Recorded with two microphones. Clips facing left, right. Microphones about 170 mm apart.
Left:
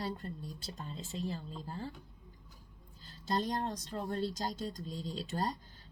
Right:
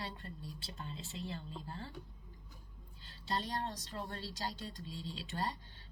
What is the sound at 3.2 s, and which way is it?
Speech, 40° left (ahead or behind).